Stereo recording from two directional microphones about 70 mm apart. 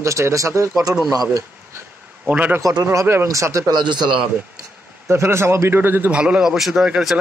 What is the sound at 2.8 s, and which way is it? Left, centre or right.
Speech, right.